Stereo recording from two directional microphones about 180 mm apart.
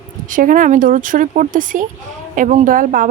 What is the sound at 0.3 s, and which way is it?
Speech, 45° right (ahead or behind).